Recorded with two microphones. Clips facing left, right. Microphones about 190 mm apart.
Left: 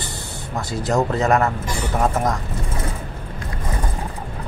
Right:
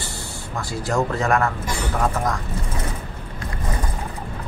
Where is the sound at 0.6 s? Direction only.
20° left (ahead or behind).